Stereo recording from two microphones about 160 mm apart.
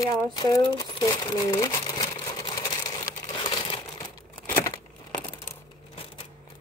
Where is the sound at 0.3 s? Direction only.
25° left (ahead or behind).